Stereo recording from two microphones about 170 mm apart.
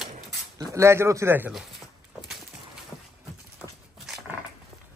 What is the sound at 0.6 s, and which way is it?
Speech, 15° right (ahead or behind).